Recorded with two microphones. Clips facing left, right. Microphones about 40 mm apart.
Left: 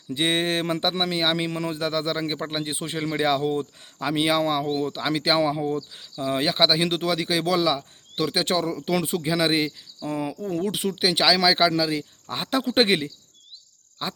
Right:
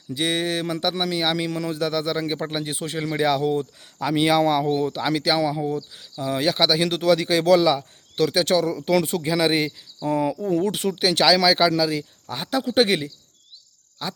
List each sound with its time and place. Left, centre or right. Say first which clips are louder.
0.1 s a man's voice: even; left
3.0 s speech: right 2 dB; centre
5.2 s a man's voice: left 2 dB; left
5.7 s speech: even; centre
14.0 s a man's voice: even; left